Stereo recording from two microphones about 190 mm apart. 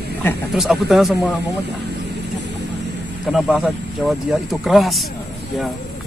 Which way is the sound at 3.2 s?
5° right (ahead or behind).